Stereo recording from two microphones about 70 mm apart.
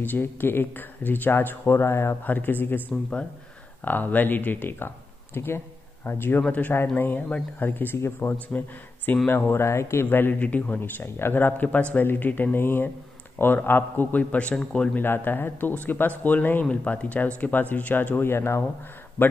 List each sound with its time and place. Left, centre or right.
0.0 s speech: left
2.2 s speech: left
3.8 s speech: left
10.0 s speech: left
15.0 s speech: left